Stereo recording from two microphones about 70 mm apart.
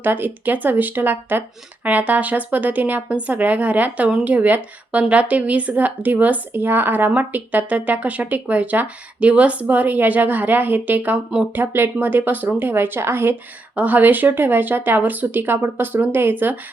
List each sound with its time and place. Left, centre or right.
0.0 s a woman's voice: right
13.7 s a woman's voice: right